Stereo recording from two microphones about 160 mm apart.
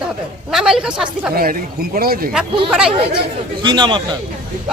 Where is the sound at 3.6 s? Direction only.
30° right (ahead or behind).